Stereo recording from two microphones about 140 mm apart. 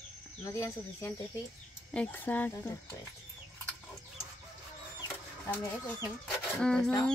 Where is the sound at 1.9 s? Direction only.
15° left (ahead or behind).